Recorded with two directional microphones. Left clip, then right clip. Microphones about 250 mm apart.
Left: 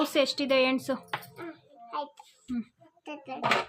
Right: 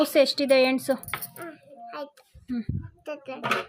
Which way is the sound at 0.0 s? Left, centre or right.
Centre.